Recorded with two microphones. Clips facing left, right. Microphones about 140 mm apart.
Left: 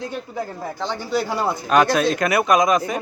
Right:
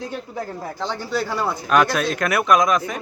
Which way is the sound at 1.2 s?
15° left (ahead or behind).